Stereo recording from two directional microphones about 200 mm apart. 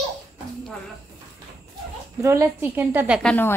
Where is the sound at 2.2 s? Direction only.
15° right (ahead or behind).